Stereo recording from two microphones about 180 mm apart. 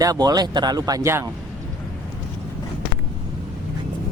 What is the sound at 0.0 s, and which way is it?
Speech, 20° right (ahead or behind).